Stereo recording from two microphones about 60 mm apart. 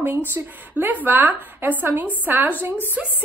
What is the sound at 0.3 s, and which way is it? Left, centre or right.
A woman's voice, right.